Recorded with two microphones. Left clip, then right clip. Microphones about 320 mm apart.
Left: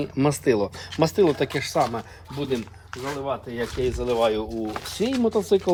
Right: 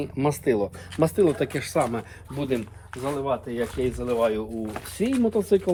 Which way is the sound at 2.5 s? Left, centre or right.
Centre.